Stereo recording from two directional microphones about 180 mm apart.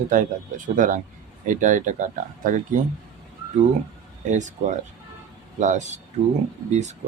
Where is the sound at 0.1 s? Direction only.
45° right (ahead or behind).